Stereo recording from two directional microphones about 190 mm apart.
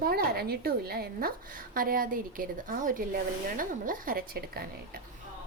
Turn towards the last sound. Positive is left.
turn(degrees=-55)  # may be behind; listen again after turning